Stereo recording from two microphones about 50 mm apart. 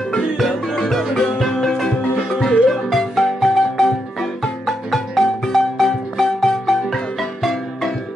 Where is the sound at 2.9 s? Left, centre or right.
Centre.